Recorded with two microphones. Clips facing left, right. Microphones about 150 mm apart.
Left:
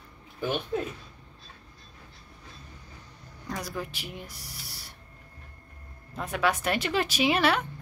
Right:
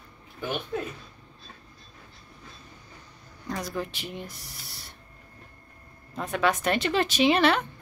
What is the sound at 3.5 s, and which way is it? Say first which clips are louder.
Speech: right 3 dB; 10° left (ahead or behind).